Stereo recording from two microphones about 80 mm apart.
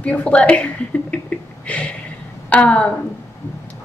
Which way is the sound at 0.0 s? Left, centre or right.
Centre.